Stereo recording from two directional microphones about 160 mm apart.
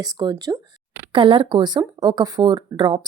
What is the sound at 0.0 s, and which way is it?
A woman's voice, 25° right (ahead or behind).